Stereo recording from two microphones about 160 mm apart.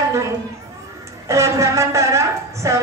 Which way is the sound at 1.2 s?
20° right (ahead or behind).